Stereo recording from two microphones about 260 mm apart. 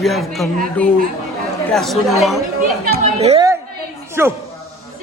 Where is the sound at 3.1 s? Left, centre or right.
Right.